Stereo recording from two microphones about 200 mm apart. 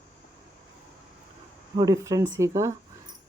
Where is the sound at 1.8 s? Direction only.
15° right (ahead or behind).